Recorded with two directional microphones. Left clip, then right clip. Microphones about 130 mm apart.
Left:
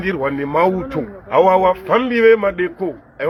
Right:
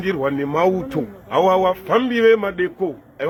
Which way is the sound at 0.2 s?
50° right (ahead or behind).